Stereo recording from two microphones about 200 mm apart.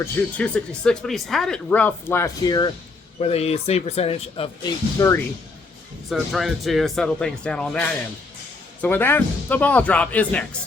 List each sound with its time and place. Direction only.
0.0 s speech: 5° left (ahead or behind)
3.2 s speech: 30° left (ahead or behind)
4.9 s speech: 15° left (ahead or behind)
6.1 s speech: centre (ahead or behind)
8.8 s speech: 10° left (ahead or behind)